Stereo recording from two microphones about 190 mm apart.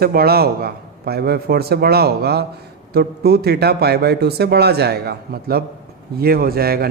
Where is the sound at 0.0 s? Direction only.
55° right (ahead or behind).